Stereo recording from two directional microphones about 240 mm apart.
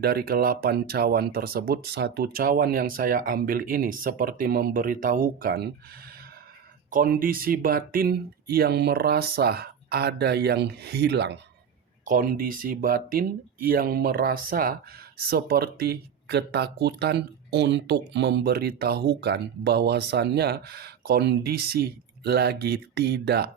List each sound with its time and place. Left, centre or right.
0.0 s speech: right
6.9 s speech: right